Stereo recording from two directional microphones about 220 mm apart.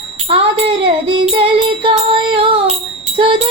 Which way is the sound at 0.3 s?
25° right (ahead or behind).